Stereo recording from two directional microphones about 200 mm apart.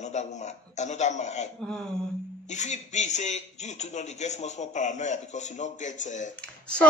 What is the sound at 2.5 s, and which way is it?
A man's voice, 35° left (ahead or behind).